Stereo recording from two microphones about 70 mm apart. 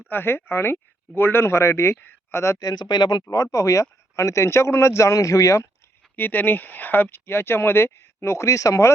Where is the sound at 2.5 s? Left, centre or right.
Left.